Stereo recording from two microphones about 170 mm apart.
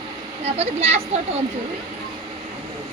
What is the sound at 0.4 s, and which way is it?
Speech, 35° right (ahead or behind).